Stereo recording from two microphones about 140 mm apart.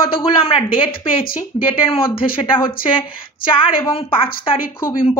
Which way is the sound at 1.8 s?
40° left (ahead or behind).